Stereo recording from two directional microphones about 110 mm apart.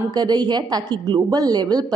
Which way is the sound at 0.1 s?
40° right (ahead or behind).